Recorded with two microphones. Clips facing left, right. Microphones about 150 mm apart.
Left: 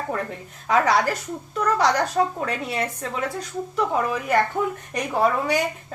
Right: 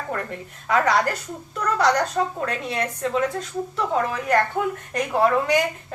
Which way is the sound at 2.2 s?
20° left (ahead or behind).